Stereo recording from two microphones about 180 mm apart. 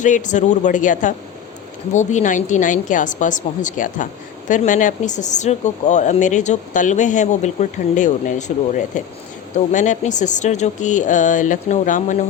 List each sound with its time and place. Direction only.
0.0 s a woman's voice: 45° left (ahead or behind)